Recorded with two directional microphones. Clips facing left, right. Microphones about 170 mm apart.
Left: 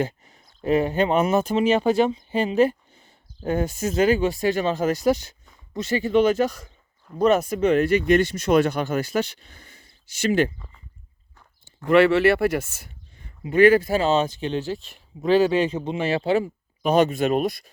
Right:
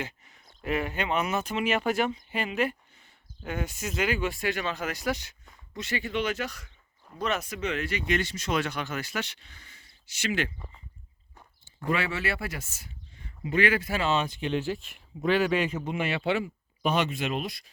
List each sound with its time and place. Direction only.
0.0 s speech: 35° left (ahead or behind)
1.5 s speech: 35° left (ahead or behind)
3.8 s speech: 45° left (ahead or behind)
11.9 s speech: 70° left (ahead or behind)
13.5 s speech: 45° left (ahead or behind)